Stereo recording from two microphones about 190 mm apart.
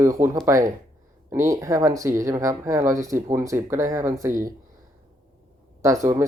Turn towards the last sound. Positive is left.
turn(degrees=-15)  # may be behind; listen again after turning